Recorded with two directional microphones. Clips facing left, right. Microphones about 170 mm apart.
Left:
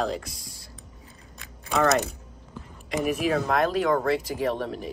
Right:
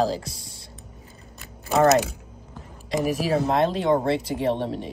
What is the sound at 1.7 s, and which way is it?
Mechanisms, 30° right (ahead or behind).